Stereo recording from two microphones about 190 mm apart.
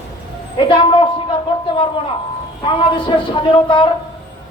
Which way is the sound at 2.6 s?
25° left (ahead or behind).